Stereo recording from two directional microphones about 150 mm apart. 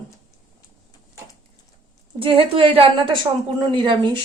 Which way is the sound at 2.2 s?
35° right (ahead or behind).